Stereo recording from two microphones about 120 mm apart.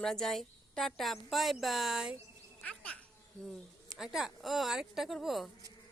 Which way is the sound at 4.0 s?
5° right (ahead or behind).